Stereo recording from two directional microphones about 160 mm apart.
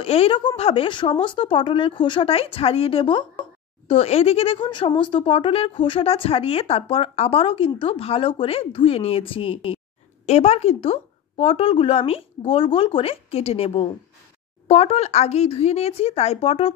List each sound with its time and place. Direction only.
0.0 s speech: 35° left (ahead or behind)